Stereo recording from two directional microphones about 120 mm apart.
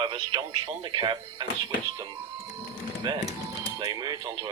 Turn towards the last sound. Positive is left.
turn(degrees=-35)  # may be behind; listen again after turning